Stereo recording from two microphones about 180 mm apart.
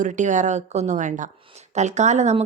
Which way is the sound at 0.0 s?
45° right (ahead or behind).